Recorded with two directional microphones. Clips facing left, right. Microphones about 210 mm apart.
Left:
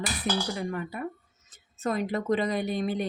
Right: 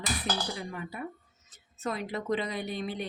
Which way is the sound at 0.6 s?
55° left (ahead or behind).